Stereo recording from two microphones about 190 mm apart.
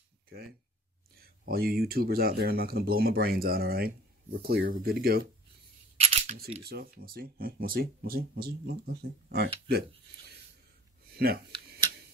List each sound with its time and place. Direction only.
1.2 s speech: 55° right (ahead or behind)
5.9 s scissors: 35° right (ahead or behind)
6.6 s speech: 55° right (ahead or behind)
11.1 s speech: 55° right (ahead or behind)